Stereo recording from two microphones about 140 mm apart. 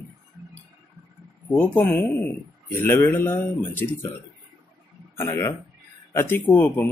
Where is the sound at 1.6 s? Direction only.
15° left (ahead or behind).